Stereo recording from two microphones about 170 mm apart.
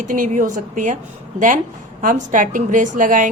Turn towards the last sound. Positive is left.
turn(degrees=-50)  # may be behind; listen again after turning